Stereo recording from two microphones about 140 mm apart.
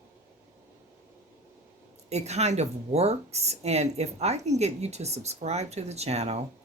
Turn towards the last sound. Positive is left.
turn(degrees=-50)  # may be behind; listen again after turning